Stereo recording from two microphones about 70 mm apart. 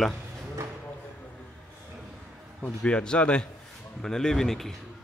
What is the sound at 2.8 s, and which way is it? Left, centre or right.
A man's voice, centre.